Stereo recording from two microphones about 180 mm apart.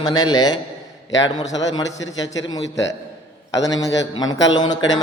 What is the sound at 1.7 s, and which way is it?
Speech, 20° left (ahead or behind).